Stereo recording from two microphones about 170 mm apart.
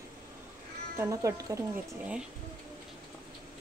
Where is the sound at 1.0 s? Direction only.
20° right (ahead or behind).